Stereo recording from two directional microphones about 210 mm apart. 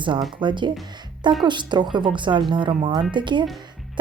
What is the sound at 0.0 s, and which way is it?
Speech, 20° right (ahead or behind).